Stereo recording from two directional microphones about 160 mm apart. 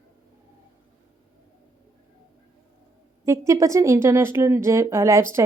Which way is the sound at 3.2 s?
20° right (ahead or behind).